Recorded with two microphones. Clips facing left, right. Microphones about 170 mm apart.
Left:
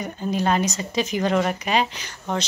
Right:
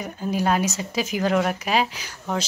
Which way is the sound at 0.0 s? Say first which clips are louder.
Even; 5° right (ahead or behind).